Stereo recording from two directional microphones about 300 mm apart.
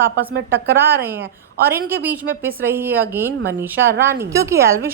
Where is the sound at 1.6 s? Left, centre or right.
Centre.